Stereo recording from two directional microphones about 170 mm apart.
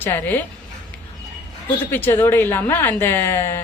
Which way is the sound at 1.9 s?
10° left (ahead or behind).